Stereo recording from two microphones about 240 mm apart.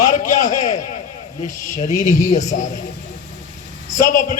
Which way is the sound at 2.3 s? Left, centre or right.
Left.